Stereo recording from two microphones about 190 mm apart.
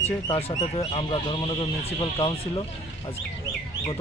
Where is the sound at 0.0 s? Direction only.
30° left (ahead or behind).